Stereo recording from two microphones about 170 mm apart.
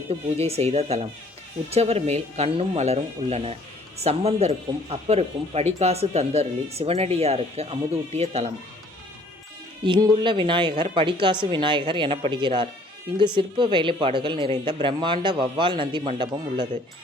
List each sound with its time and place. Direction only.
0.1 s speech: 35° right (ahead or behind)
9.8 s speech: 25° right (ahead or behind)